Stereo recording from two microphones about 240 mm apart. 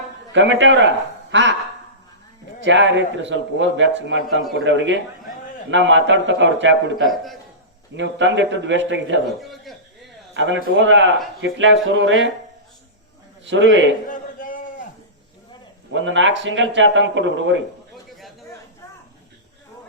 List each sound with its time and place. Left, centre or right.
0.3 s a man's voice: right
1.3 s a sound: right
2.6 s a man's voice: right
7.9 s a man's voice: right
9.4 s a man's voice: centre
10.3 s a man's voice: right
13.4 s a man's voice: right
14.1 s a sound: left
15.9 s a man's voice: right